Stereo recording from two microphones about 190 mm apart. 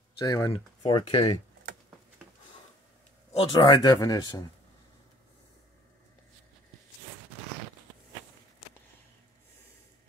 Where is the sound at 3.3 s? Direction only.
25° left (ahead or behind).